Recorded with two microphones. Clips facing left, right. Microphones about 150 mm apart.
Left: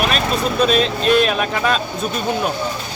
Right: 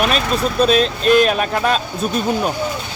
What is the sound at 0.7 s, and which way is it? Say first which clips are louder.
Speech: right 3 dB; centre (ahead or behind).